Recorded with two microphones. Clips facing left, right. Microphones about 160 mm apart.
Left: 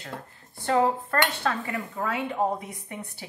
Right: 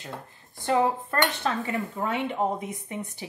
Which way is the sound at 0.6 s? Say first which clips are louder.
Left 1 dB; 20° right (ahead or behind).